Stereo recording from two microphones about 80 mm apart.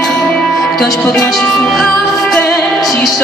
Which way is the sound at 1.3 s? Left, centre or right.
Centre.